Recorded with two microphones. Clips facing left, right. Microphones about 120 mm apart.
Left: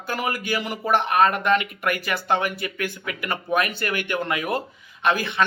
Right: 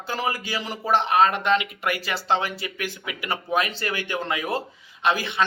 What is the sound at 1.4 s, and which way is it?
Speech, 25° right (ahead or behind).